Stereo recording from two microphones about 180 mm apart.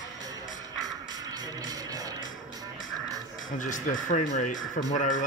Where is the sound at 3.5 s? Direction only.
45° left (ahead or behind).